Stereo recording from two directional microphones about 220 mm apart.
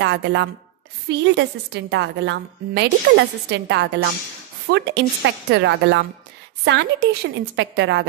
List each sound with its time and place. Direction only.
0.0 s chopping: 50° right (ahead or behind)
1.0 s a woman's voice: 50° right (ahead or behind)